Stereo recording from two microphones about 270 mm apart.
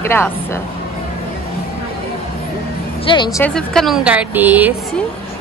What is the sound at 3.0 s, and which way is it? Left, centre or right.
A woman's voice, centre.